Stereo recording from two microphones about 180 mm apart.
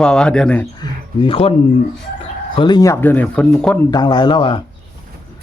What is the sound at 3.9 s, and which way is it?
Speech, 25° left (ahead or behind).